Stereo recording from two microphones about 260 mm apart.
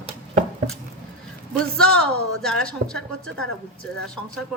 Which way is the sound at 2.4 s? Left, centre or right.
Centre.